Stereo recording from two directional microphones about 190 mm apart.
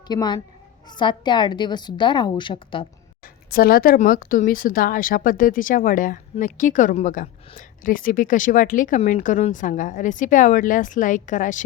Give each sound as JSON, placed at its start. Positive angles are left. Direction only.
{"t": 0.1, "sound": "a woman's voice", "side_deg": 20}
{"t": 3.5, "sound": "a woman's voice", "side_deg": 50}